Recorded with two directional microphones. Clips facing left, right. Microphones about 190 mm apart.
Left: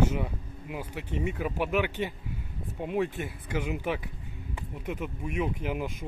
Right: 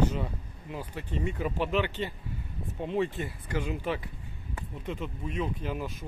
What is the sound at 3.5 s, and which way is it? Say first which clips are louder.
Speech: left 1 dB; 15° left (ahead or behind).